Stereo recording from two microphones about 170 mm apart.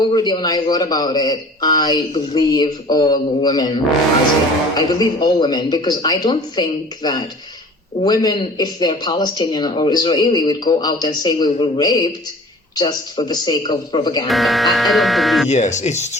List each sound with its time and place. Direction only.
0.1 s speech: 25° left (ahead or behind)
4.8 s speech: 25° left (ahead or behind)
14.3 s speech: centre (ahead or behind)
15.4 s speech: 45° left (ahead or behind)